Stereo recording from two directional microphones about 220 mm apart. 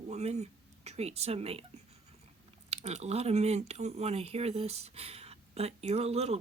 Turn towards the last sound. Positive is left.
turn(degrees=-30)  # may be behind; listen again after turning